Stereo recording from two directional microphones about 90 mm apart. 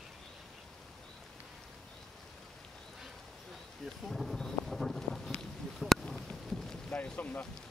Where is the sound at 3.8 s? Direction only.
Centre (ahead or behind).